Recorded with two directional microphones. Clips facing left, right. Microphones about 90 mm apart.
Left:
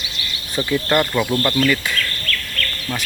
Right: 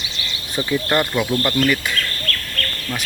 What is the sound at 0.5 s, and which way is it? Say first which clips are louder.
Speech: left 1 dB; 15° right (ahead or behind).